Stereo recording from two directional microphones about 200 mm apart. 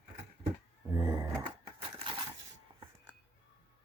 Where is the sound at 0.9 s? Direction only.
20° right (ahead or behind).